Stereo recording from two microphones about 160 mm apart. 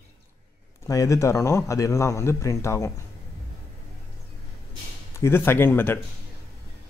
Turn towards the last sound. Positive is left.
turn(degrees=15)  # may be behind; listen again after turning